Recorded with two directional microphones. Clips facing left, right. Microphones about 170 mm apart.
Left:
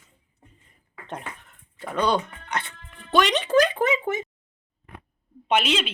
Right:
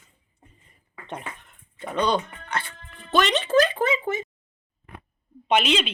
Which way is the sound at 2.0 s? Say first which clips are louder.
Even; 10° left (ahead or behind).